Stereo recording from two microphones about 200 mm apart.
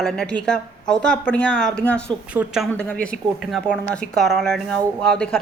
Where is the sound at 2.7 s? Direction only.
5° left (ahead or behind).